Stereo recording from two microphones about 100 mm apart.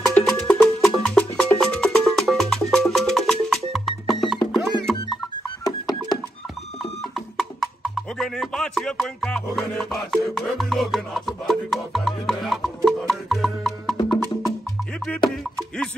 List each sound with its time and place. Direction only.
0.0 s music: 5° left (ahead or behind)
5.6 s music: 40° left (ahead or behind)
6.8 s music: 5° left (ahead or behind)